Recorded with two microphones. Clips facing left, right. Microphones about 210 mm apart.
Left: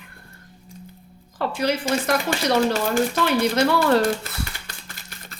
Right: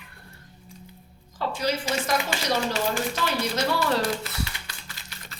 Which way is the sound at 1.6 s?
55° left (ahead or behind).